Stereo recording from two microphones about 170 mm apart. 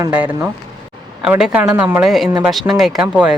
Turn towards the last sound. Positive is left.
turn(degrees=-5)  # may be behind; listen again after turning